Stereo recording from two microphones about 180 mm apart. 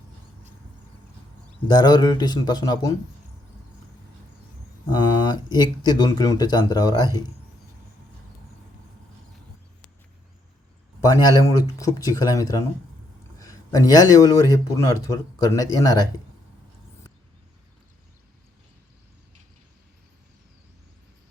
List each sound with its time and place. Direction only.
1.6 s a man's voice: 25° left (ahead or behind)
4.9 s speech: 25° left (ahead or behind)
11.0 s a man's voice: 20° left (ahead or behind)